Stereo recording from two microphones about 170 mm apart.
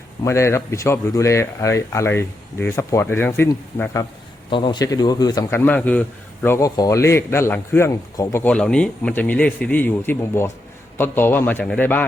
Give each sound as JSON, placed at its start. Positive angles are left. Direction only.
{"t": 0.3, "sound": "a man's voice", "side_deg": 15}
{"t": 4.4, "sound": "a man's voice", "side_deg": 30}